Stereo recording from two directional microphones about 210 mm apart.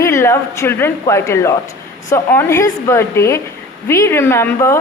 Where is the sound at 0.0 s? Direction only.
15° left (ahead or behind).